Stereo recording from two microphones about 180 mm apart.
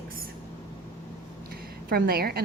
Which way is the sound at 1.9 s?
55° right (ahead or behind).